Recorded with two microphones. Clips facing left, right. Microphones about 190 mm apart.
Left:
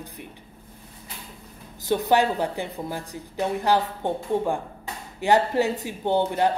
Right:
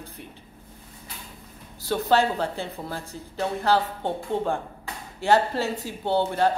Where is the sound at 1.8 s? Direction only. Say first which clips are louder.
Left 1 dB; 15° left (ahead or behind).